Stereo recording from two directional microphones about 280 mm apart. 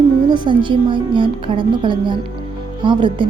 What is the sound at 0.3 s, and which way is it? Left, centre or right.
A woman's voice, centre.